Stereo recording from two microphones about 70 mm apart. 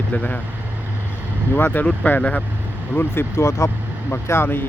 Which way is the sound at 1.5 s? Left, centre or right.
Left.